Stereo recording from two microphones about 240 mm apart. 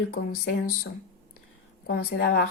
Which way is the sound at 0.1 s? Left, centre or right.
Left.